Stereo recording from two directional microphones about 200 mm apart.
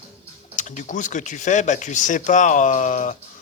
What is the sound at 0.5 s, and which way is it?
Speech, 35° left (ahead or behind).